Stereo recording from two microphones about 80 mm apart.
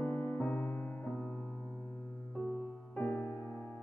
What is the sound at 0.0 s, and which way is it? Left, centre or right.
Music, left.